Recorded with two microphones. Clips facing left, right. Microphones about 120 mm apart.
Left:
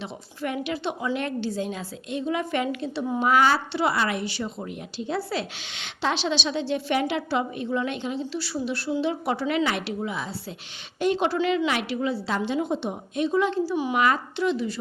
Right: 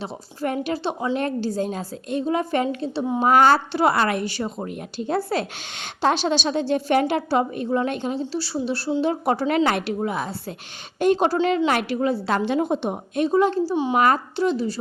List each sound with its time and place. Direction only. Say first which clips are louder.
0.0 s a woman's voice: right 4 dB; 40° right (ahead or behind)
8.2 s a woman's voice: right 3 dB; 30° right (ahead or behind)